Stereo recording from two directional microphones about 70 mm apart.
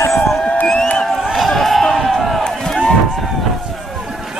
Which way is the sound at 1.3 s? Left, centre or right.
Centre.